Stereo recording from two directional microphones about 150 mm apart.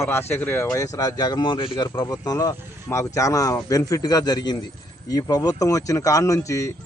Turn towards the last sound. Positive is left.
turn(degrees=20)  # may be behind; listen again after turning